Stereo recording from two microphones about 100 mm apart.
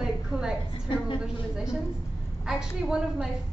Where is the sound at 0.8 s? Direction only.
50° left (ahead or behind).